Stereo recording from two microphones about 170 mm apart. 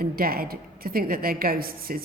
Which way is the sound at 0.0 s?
60° right (ahead or behind).